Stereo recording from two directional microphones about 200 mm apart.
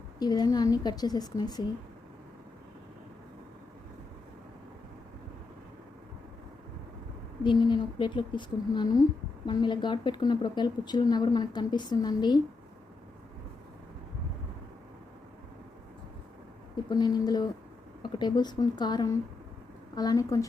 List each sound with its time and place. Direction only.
0.2 s speech: 20° left (ahead or behind)
7.4 s speech: 25° left (ahead or behind)
16.9 s a woman's voice: 20° left (ahead or behind)